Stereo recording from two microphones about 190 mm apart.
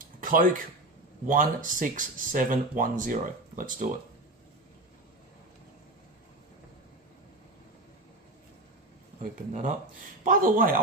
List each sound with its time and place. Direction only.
0.2 s speech: 45° right (ahead or behind)
9.2 s speech: 45° right (ahead or behind)